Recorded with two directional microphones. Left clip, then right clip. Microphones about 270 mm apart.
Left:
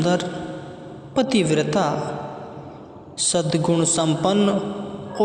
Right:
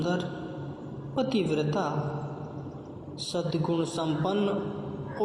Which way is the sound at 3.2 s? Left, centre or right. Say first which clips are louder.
Left 9 dB; left.